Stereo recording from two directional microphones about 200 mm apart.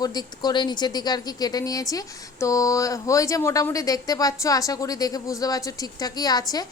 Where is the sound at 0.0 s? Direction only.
20° left (ahead or behind).